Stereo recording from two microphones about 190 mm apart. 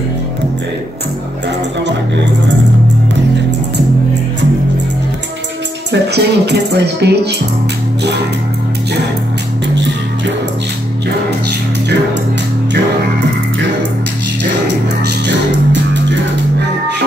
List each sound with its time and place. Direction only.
5.9 s speech: 60° right (ahead or behind)
9.8 s music: 70° right (ahead or behind)
15.0 s music: 65° right (ahead or behind)